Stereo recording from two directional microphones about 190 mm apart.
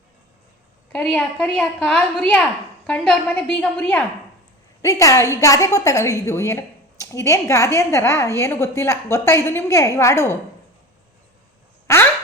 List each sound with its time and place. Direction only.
0.9 s a woman's voice: 5° left (ahead or behind)